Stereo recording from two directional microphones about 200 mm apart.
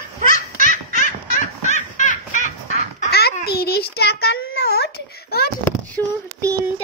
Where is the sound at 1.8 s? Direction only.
40° left (ahead or behind).